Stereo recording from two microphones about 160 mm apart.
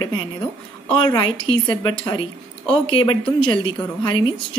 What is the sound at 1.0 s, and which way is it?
A woman's voice, 30° left (ahead or behind).